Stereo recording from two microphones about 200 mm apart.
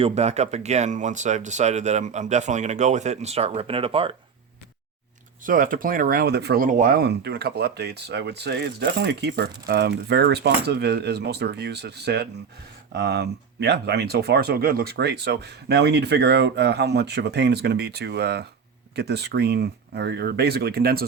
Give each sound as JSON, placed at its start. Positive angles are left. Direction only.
{"t": 0.0, "sound": "speech", "side_deg": -35}
{"t": 5.5, "sound": "speech", "side_deg": -45}